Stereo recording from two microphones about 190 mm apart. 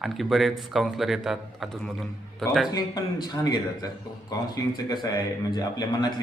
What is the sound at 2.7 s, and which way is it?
A man's voice, 20° left (ahead or behind).